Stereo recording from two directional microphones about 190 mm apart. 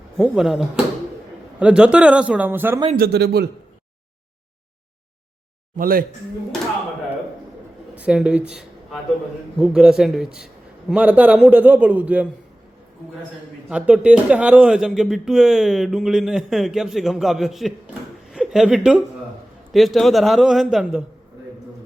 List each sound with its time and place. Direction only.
0.2 s a man's voice: centre (ahead or behind)
2.9 s a man's voice: 55° right (ahead or behind)
5.7 s a man's voice: 50° right (ahead or behind)
7.9 s a man's voice: 5° right (ahead or behind)
13.7 s a man's voice: 5° right (ahead or behind)